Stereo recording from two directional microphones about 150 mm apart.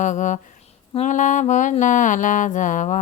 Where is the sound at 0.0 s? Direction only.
55° left (ahead or behind).